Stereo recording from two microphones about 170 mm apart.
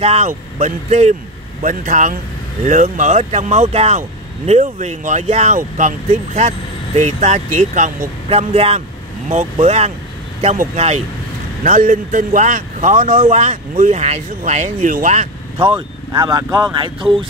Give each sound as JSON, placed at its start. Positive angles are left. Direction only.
{"t": 0.0, "sound": "a man's voice", "side_deg": -40}